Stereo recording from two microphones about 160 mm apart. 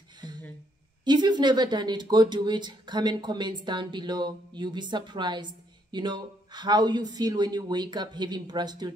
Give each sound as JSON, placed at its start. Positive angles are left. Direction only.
{"t": 1.0, "sound": "a woman's voice", "side_deg": -25}